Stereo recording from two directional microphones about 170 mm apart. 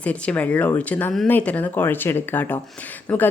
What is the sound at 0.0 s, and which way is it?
A woman's voice, 5° left (ahead or behind).